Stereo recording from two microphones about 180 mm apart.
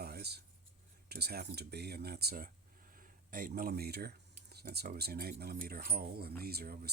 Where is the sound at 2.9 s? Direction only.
50° right (ahead or behind).